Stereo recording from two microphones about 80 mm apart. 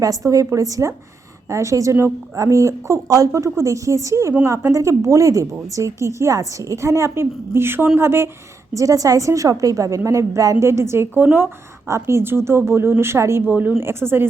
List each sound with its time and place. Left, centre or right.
0.0 s a woman's voice: right
8.7 s a woman's voice: right
11.9 s a woman's voice: right
13.5 s speech: right